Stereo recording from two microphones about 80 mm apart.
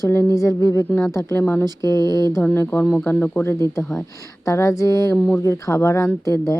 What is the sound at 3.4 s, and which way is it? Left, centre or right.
A woman's voice, left.